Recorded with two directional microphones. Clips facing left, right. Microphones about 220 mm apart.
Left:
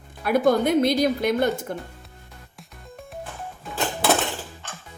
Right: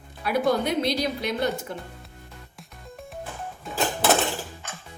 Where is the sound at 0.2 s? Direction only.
50° left (ahead or behind).